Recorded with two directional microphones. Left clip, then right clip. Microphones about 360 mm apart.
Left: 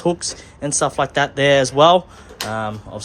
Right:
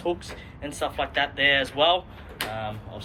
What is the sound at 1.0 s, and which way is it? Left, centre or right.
Speech, left.